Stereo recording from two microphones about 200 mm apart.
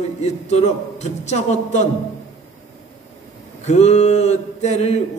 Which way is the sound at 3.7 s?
35° left (ahead or behind).